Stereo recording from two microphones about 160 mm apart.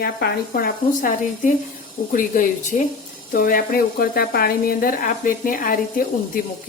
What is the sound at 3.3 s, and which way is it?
Speech, 65° left (ahead or behind).